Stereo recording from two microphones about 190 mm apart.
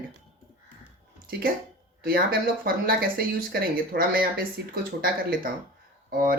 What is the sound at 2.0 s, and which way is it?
Speech, 50° right (ahead or behind).